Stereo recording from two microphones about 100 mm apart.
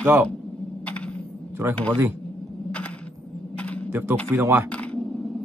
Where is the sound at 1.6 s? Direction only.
25° right (ahead or behind).